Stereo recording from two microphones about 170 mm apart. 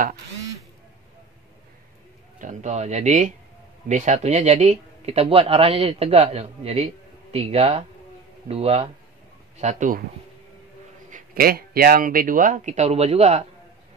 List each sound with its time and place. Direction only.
2.3 s speech: 45° right (ahead or behind)
11.1 s speech: 55° right (ahead or behind); by 13.5 s 40° right (ahead or behind)